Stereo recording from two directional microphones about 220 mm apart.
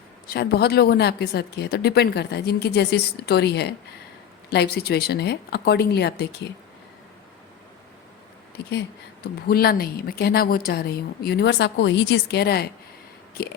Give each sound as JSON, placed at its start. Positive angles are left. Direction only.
{"t": 0.3, "sound": "a woman's voice", "side_deg": 50}
{"t": 9.2, "sound": "a woman's voice", "side_deg": 45}